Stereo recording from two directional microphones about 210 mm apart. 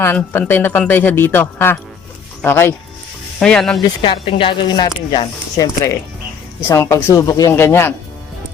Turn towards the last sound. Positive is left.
turn(degrees=10)  # may be behind; listen again after turning